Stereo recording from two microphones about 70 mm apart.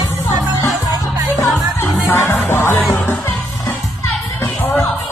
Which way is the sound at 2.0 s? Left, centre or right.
Left.